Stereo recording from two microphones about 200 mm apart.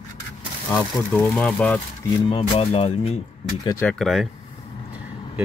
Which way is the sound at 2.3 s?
30° left (ahead or behind).